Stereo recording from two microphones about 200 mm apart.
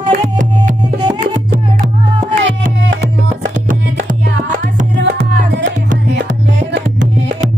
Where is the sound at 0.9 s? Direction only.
20° right (ahead or behind).